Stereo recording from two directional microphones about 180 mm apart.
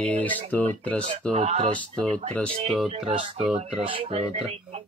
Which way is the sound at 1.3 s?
35° right (ahead or behind).